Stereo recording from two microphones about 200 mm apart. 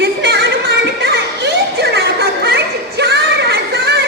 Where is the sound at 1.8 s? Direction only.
55° right (ahead or behind).